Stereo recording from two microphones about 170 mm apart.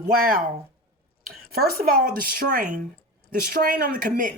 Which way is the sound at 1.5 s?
65° right (ahead or behind).